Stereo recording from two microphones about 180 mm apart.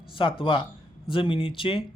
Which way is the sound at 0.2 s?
30° left (ahead or behind).